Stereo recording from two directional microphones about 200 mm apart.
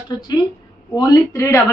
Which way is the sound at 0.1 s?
20° left (ahead or behind).